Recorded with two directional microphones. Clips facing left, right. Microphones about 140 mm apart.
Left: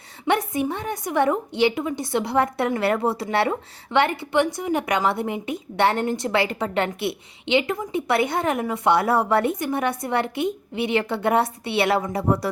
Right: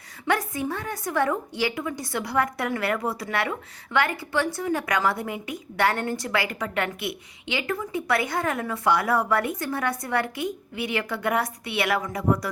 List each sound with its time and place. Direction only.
0.3 s a woman's voice: 20° left (ahead or behind)